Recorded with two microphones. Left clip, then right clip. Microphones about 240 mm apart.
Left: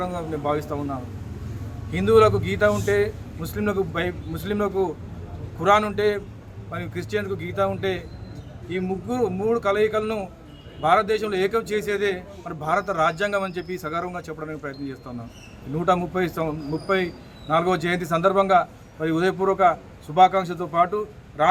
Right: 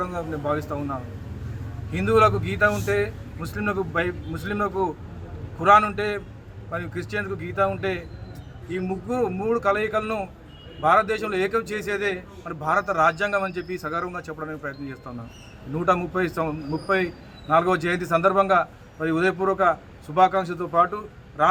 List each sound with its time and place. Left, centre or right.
0.0 s a man's voice: centre